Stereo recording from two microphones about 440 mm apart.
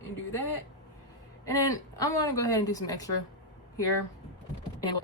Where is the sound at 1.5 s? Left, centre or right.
Centre.